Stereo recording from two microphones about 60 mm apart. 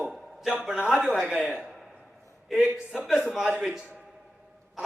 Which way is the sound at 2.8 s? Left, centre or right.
Centre.